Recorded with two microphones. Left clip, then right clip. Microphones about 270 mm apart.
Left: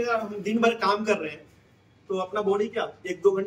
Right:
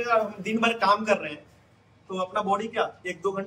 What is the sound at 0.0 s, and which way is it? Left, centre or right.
A man's voice, centre.